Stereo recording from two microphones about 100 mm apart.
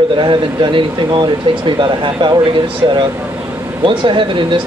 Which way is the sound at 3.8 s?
55° right (ahead or behind).